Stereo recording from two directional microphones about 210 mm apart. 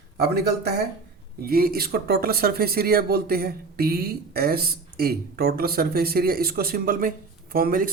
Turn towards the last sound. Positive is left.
turn(degrees=-45)  # may be behind; listen again after turning